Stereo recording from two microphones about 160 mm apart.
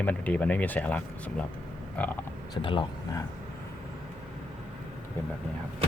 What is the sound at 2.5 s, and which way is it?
Speech, 30° left (ahead or behind).